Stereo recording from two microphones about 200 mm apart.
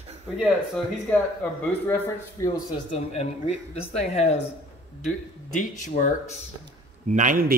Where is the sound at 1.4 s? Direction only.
10° left (ahead or behind).